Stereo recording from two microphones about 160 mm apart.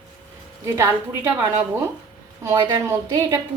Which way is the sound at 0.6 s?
20° right (ahead or behind).